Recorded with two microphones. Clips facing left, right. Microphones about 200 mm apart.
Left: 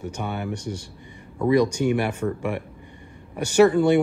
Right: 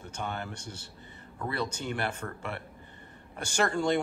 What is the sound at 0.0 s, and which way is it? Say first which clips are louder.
Speech: left 7 dB; 10° left (ahead or behind).